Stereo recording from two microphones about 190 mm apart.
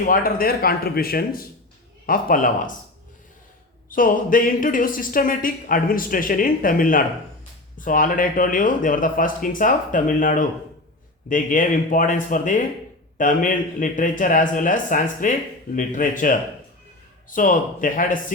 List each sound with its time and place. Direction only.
0.0 s speech: 50° left (ahead or behind)
3.8 s speech: 45° left (ahead or behind)